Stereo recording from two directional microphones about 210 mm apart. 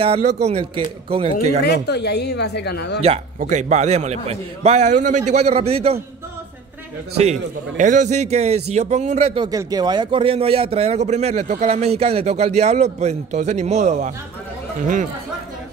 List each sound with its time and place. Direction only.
0.0 s speech: 30° right (ahead or behind)
1.6 s speech: 50° left (ahead or behind)
3.3 s a man's voice: 35° right (ahead or behind)
7.2 s a man's voice: 35° right (ahead or behind)